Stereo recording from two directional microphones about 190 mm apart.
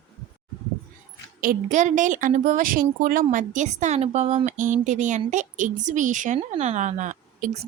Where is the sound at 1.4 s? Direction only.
45° right (ahead or behind).